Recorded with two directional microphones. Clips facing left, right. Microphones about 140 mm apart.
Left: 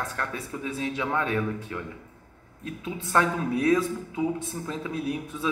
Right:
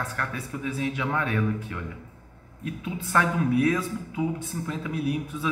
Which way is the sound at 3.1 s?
30° left (ahead or behind).